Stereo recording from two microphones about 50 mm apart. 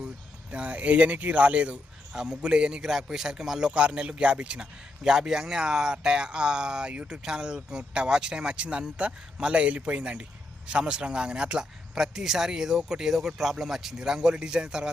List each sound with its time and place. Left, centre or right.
0.5 s speech: right
2.1 s speech: centre
3.7 s speech: right